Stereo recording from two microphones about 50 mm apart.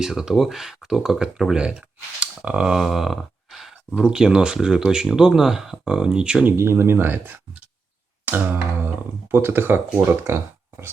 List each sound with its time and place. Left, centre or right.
0.0 s speech: centre
2.7 s a sound: centre
4.1 s speech: centre
6.6 s speech: right
7.1 s speech: right
8.2 s music: right
9.3 s speech: right